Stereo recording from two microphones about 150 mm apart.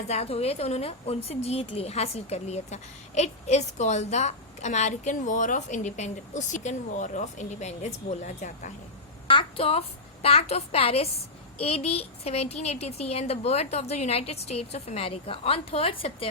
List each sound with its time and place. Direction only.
0.1 s a woman's voice: 45° left (ahead or behind)
9.3 s a woman's voice: 35° left (ahead or behind)